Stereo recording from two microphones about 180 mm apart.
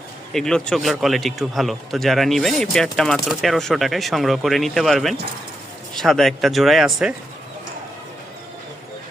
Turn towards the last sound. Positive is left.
turn(degrees=0)  # may be behind; listen again after turning